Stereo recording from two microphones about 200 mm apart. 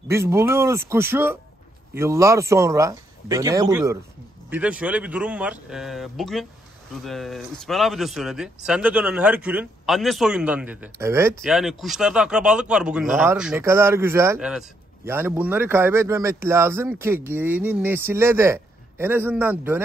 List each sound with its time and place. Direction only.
0.1 s speech: 15° right (ahead or behind)
11.4 s speech: centre (ahead or behind)